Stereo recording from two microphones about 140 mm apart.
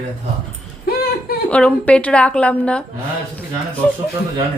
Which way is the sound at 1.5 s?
5° left (ahead or behind).